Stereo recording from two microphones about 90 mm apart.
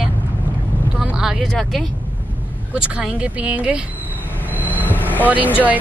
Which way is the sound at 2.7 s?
10° right (ahead or behind).